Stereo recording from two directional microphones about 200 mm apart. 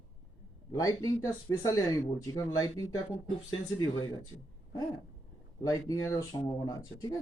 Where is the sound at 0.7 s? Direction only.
15° left (ahead or behind).